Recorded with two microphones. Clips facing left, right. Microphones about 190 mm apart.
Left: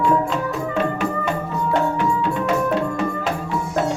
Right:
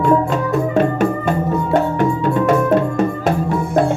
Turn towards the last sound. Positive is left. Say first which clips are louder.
# right 5 dB
turn(degrees=-45)  # may be behind; listen again after turning